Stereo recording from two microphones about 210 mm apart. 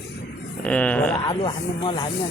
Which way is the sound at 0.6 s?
5° left (ahead or behind).